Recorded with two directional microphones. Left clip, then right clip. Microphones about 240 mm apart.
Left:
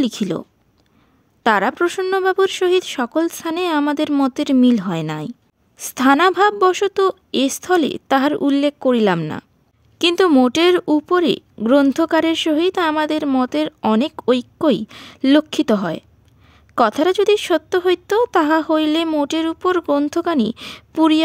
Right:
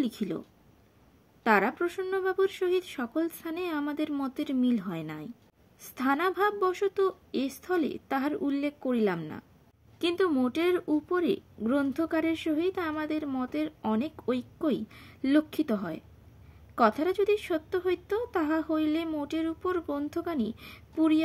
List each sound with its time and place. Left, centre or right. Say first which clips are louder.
0.0 s a woman's voice: left 11 dB; left
1.4 s a woman's voice: left 9 dB; left